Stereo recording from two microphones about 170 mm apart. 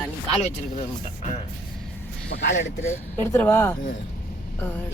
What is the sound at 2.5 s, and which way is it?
Speech, 40° left (ahead or behind).